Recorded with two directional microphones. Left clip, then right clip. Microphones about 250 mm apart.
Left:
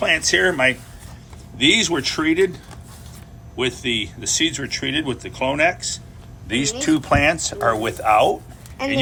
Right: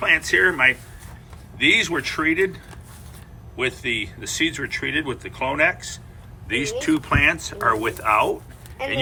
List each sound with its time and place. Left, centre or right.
0.0 s speech: centre
3.6 s speech: centre